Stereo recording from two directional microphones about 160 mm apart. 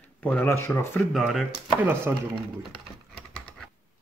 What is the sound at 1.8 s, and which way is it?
Speech, 15° right (ahead or behind).